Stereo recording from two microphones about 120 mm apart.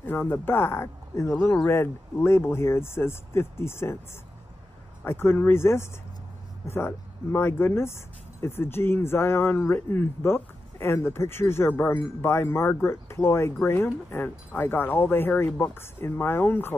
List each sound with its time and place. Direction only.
0.0 s speech: 15° left (ahead or behind)
5.0 s speech: 20° left (ahead or behind)